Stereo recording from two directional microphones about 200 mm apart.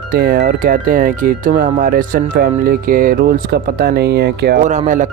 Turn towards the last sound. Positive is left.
turn(degrees=-40)  # may be behind; listen again after turning